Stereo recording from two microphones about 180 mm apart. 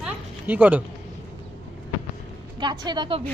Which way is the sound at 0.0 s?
10° right (ahead or behind).